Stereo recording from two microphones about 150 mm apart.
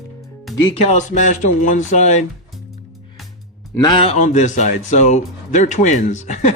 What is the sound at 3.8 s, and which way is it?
Speech, 30° left (ahead or behind).